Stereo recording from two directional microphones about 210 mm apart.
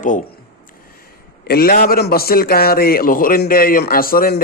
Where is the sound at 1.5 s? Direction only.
45° left (ahead or behind).